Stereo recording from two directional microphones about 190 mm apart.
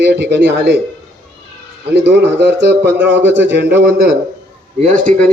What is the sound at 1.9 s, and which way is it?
Speech, 65° right (ahead or behind).